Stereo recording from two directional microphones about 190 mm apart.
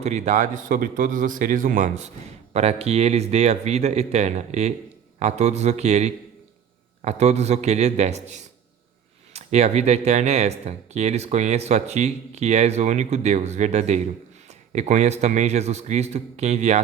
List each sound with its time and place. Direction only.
0.0 s a man's voice: 35° right (ahead or behind)